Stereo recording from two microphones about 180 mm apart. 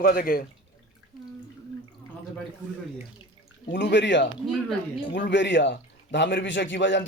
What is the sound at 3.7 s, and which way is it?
A man's voice, 75° left (ahead or behind).